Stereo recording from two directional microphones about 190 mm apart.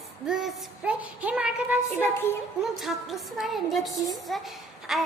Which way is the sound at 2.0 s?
10° left (ahead or behind).